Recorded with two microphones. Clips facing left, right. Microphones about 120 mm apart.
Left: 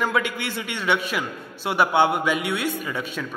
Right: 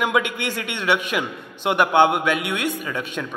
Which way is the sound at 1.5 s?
5° left (ahead or behind).